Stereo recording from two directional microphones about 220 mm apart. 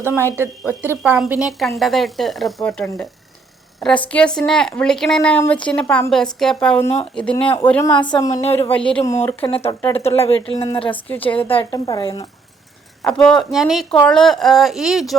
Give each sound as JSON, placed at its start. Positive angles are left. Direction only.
{"t": 0.0, "sound": "a woman's voice", "side_deg": -10}
{"t": 8.7, "sound": "a woman's voice", "side_deg": 5}
{"t": 9.4, "sound": "speech", "side_deg": 25}
{"t": 10.9, "sound": "a woman's voice", "side_deg": 5}
{"t": 11.5, "sound": "speech", "side_deg": 20}
{"t": 13.1, "sound": "a woman's voice", "side_deg": 5}